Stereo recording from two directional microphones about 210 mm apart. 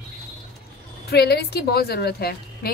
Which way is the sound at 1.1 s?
50° left (ahead or behind).